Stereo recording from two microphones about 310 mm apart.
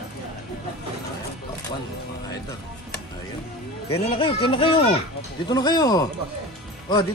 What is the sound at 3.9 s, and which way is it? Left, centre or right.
Speech, centre.